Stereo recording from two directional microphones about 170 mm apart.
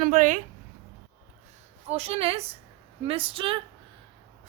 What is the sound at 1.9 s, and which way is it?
A woman's voice, 35° right (ahead or behind).